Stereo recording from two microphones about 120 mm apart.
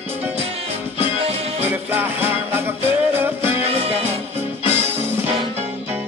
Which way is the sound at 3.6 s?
55° right (ahead or behind).